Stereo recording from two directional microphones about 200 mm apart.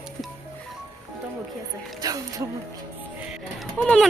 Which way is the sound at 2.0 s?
20° right (ahead or behind).